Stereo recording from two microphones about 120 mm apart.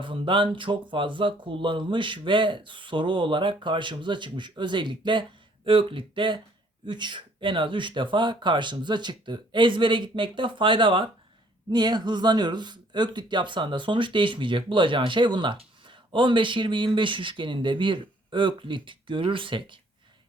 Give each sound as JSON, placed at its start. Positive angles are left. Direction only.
{"t": 0.0, "sound": "speech", "side_deg": -45}